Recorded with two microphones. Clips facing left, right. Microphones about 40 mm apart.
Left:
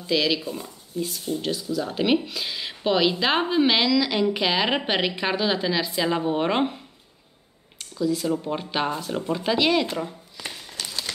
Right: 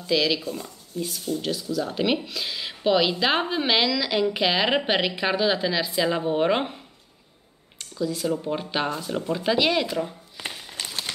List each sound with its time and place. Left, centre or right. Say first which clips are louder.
0.0 s speech: even; centre
7.8 s speech: left 2 dB; centre
10.3 s a sound: right 1 dB; centre